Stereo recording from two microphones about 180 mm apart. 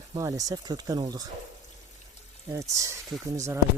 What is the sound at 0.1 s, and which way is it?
Speech, 20° right (ahead or behind).